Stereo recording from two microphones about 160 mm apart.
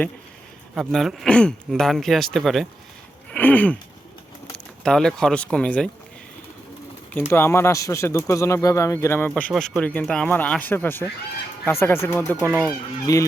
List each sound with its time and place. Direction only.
0.8 s speech: centre (ahead or behind)
7.1 s speech: 15° left (ahead or behind)